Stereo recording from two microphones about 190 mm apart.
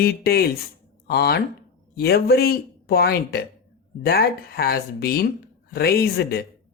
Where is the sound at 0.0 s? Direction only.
55° left (ahead or behind).